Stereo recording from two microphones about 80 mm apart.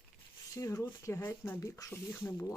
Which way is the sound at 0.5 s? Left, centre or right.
Left.